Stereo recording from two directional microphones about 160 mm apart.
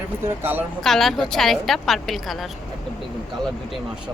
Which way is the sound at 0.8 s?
Centre (ahead or behind).